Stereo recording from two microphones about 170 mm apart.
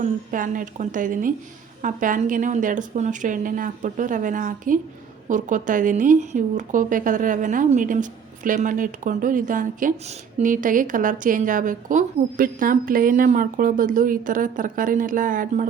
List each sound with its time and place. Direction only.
0.0 s a woman's voice: 50° right (ahead or behind)